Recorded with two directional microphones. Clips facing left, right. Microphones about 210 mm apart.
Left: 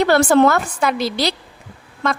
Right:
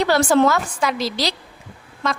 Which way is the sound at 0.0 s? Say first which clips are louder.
Left 3 dB; 55° left (ahead or behind).